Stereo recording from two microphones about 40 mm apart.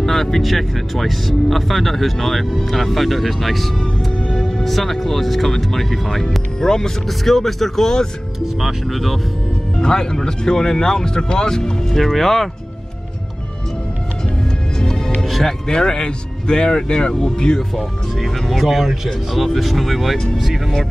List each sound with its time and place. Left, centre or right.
0.0 s speech: centre
8.5 s speech: centre
9.8 s speech: centre
14.8 s music: centre
15.2 s music: centre
15.7 s a man's voice: centre
17.7 s speech: centre